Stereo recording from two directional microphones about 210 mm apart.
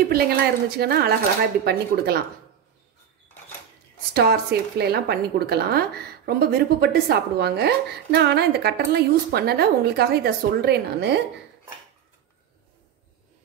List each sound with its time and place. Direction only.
0.1 s a woman's voice: 45° right (ahead or behind)
4.1 s a woman's voice: 50° right (ahead or behind)